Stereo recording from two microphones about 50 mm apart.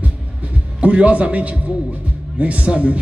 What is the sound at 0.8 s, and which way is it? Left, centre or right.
A man's voice, right.